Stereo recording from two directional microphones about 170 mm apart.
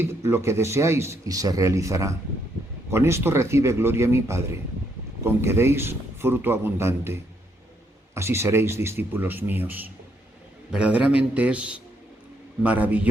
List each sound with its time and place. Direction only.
0.0 s speech: 15° right (ahead or behind)